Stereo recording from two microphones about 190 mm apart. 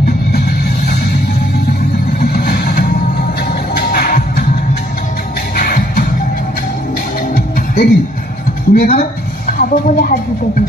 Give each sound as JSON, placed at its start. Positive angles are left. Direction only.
{"t": 2.1, "sound": "vehicle", "side_deg": 55}
{"t": 3.7, "sound": "music", "side_deg": 55}
{"t": 5.6, "sound": "music", "side_deg": 50}
{"t": 7.3, "sound": "music", "side_deg": 55}
{"t": 8.7, "sound": "speech", "side_deg": 50}